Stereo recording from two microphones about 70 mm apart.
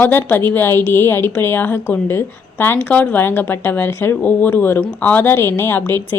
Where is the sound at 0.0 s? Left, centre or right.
Left.